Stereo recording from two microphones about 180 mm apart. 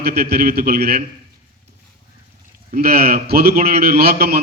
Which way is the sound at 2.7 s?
55° right (ahead or behind).